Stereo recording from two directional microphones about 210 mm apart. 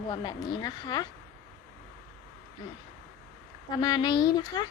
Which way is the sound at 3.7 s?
20° left (ahead or behind).